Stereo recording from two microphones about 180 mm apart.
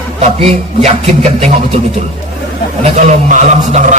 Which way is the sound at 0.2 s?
40° right (ahead or behind).